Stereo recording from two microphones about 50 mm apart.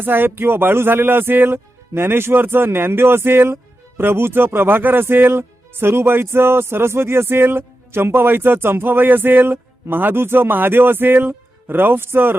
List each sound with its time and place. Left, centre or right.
0.0 s speech: right